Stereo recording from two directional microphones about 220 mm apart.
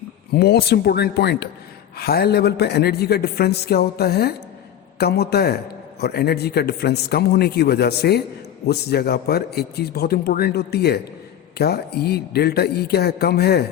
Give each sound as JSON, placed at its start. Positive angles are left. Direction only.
{"t": 0.3, "sound": "a woman's voice", "side_deg": 45}